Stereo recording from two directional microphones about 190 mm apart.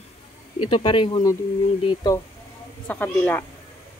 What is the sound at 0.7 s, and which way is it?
Speech, 25° left (ahead or behind).